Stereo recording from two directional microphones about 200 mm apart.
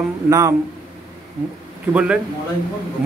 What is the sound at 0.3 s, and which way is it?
Speech, 15° right (ahead or behind).